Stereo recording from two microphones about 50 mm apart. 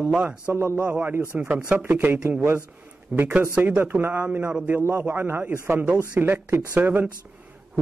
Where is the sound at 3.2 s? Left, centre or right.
Right.